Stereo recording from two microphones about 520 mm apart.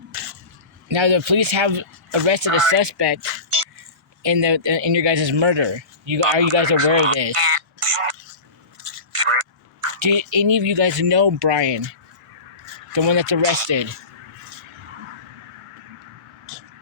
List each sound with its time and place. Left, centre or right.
0.9 s speech: right
2.7 s speech: right
3.2 s speech: right
4.2 s speech: right
8.8 s a sound: right
9.8 s speech: right
12.9 s speech: right